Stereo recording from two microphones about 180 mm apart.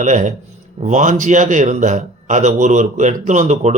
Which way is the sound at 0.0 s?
45° right (ahead or behind).